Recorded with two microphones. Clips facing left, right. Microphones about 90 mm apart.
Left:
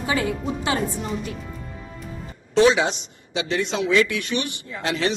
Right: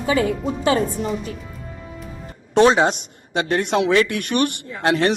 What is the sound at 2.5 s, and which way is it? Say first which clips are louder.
Speech: right 3 dB; 45° right (ahead or behind).